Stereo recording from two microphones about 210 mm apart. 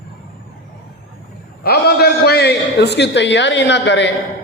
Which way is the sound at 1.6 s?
50° left (ahead or behind).